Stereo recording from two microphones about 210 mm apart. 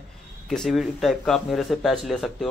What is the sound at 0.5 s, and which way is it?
Speech, centre (ahead or behind).